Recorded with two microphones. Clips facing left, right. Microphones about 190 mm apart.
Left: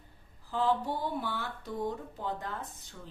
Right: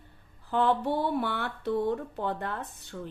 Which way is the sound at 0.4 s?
65° right (ahead or behind).